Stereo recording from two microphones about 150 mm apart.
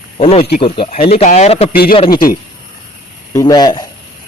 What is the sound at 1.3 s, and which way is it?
Speech, 50° left (ahead or behind).